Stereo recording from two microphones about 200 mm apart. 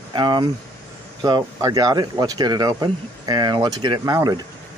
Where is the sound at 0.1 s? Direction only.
20° right (ahead or behind).